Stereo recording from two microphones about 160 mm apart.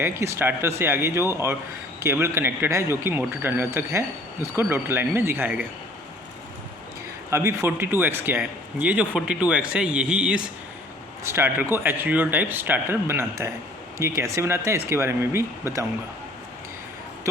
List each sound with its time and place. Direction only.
0.0 s speech: 15° right (ahead or behind)
7.3 s speech: 15° right (ahead or behind)
11.2 s speech: 15° right (ahead or behind)